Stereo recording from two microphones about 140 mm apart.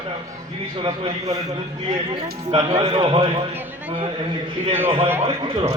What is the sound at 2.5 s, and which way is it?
Speech, 40° right (ahead or behind).